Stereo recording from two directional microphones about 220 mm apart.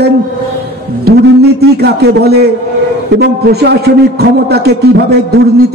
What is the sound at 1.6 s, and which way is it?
A man's voice, 45° right (ahead or behind).